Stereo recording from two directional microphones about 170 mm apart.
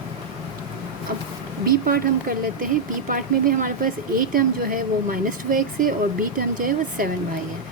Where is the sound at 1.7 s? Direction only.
55° right (ahead or behind).